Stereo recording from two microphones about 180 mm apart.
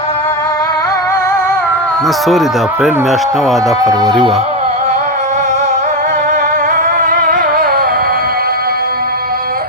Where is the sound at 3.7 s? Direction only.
20° right (ahead or behind).